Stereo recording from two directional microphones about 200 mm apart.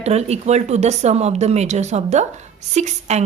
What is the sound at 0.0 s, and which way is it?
Speech, 35° right (ahead or behind).